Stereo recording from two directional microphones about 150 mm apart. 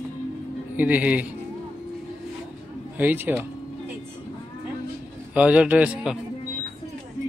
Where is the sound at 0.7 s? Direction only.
10° right (ahead or behind).